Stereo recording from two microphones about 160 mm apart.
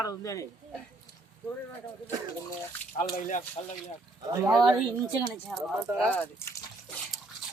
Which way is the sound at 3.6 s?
35° left (ahead or behind).